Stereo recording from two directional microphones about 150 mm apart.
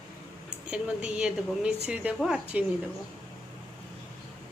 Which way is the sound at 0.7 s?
5° right (ahead or behind).